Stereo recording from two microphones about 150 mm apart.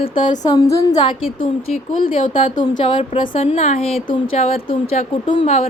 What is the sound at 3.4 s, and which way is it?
Speech, 45° left (ahead or behind).